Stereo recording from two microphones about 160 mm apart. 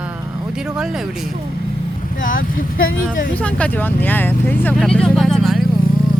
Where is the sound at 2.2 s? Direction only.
60° left (ahead or behind).